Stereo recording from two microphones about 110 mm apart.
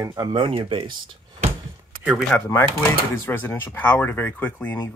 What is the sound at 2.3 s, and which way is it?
Speech, 20° left (ahead or behind).